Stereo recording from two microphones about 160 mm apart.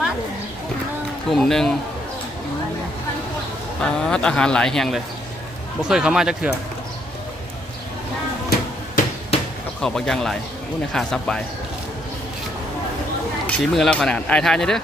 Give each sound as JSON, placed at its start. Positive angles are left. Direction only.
{"t": 1.3, "sound": "speech", "side_deg": 0}
{"t": 3.8, "sound": "speech", "side_deg": 5}
{"t": 9.8, "sound": "speech", "side_deg": 5}
{"t": 13.5, "sound": "speech", "side_deg": 0}